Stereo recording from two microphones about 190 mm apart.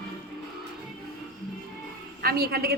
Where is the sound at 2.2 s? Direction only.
55° right (ahead or behind).